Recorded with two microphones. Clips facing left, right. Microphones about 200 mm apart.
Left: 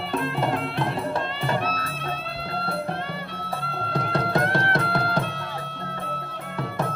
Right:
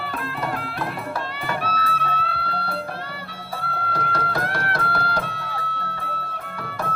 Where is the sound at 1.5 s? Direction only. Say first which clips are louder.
Right 3 dB; 25° left (ahead or behind).